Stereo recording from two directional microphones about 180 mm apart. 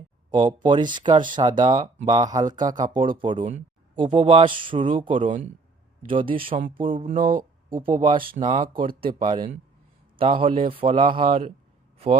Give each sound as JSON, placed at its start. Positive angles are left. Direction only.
{"t": 0.3, "sound": "speech", "side_deg": -25}
{"t": 7.2, "sound": "speech", "side_deg": -50}
{"t": 7.9, "sound": "speech", "side_deg": -25}
{"t": 8.2, "sound": "speech", "side_deg": -55}
{"t": 8.4, "sound": "speech", "side_deg": -25}